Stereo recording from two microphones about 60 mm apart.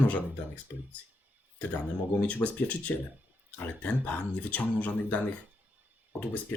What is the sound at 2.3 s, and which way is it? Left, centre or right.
Speech, left.